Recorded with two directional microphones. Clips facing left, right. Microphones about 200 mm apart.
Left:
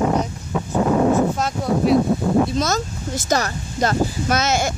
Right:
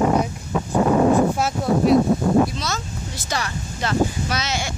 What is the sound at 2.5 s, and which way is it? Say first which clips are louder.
Speech: left 7 dB; 45° left (ahead or behind).